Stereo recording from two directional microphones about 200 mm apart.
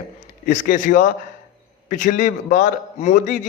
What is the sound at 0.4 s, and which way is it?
A man's voice, 40° left (ahead or behind).